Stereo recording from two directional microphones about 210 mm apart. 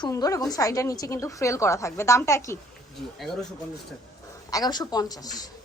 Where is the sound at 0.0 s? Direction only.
15° left (ahead or behind).